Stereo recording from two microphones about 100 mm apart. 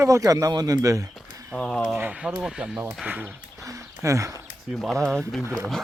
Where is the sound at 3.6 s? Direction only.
30° right (ahead or behind).